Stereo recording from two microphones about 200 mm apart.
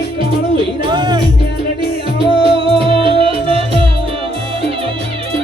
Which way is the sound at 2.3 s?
25° right (ahead or behind).